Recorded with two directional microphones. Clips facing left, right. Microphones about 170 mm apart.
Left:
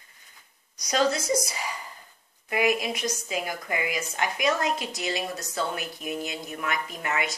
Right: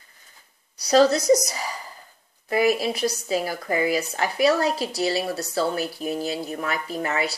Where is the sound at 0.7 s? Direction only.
35° right (ahead or behind).